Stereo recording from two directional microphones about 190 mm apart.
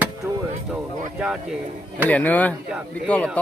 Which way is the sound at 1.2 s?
5° right (ahead or behind).